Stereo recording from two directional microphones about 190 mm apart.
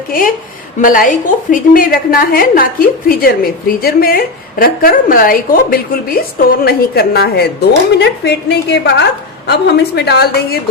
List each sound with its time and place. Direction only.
0.1 s a woman's voice: 50° left (ahead or behind)